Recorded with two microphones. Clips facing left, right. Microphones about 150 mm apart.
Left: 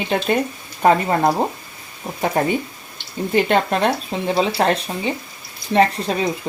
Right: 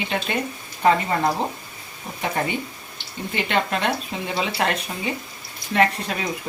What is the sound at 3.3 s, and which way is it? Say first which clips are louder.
Speech: left 6 dB; 40° left (ahead or behind).